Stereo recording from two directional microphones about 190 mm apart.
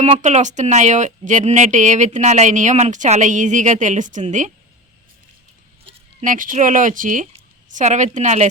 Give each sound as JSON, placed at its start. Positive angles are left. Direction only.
{"t": 0.0, "sound": "speech", "side_deg": -40}
{"t": 5.8, "sound": "speech", "side_deg": -40}